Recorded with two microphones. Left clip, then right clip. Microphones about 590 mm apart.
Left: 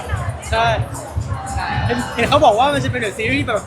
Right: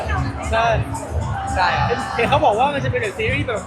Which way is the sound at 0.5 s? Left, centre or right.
Left.